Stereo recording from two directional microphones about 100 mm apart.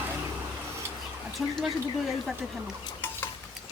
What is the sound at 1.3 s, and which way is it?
Speech, centre (ahead or behind).